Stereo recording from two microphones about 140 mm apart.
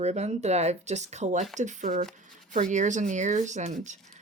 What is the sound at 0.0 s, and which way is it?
Speech, 50° right (ahead or behind).